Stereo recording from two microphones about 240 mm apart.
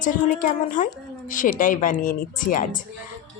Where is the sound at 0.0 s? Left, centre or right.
Left.